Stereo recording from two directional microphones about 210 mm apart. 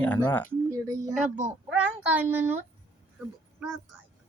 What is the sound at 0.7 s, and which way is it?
A child's voice, 15° right (ahead or behind).